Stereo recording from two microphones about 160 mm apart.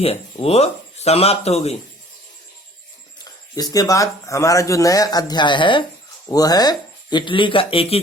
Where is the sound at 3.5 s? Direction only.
20° left (ahead or behind).